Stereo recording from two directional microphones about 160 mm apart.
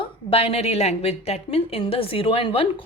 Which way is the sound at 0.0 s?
35° left (ahead or behind).